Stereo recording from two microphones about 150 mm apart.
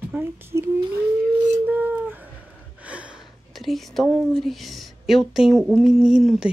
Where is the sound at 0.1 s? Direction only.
15° right (ahead or behind).